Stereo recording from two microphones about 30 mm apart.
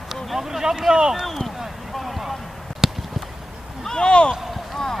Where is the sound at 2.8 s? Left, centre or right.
Centre.